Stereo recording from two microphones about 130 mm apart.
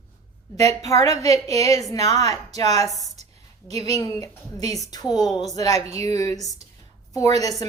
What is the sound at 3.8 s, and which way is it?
A woman's voice, 30° left (ahead or behind).